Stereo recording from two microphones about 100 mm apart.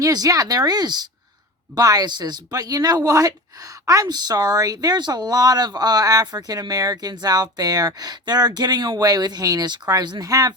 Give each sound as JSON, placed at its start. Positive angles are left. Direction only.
{"t": 0.0, "sound": "a woman's voice", "side_deg": -35}